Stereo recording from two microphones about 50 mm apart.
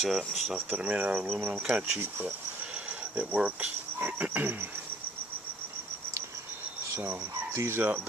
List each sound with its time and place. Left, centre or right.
0.0 s speech: centre
0.7 s speech: right
3.2 s speech: right
4.2 s speech: right
7.1 s speech: right
7.8 s speech: right